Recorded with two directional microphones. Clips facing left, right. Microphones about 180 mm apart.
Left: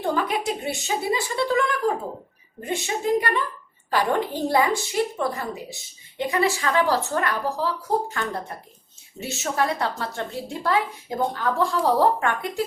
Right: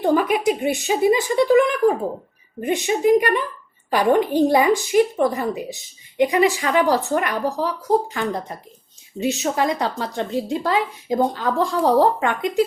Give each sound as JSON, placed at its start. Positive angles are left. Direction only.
{"t": 0.0, "sound": "a woman's voice", "side_deg": -15}